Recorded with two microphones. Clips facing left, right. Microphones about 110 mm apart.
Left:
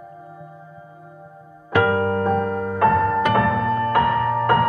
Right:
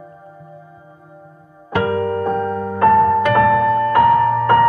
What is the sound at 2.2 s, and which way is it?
Music, 45° right (ahead or behind).